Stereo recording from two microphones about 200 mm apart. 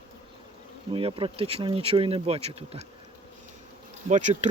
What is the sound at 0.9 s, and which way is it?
Speech, 25° right (ahead or behind).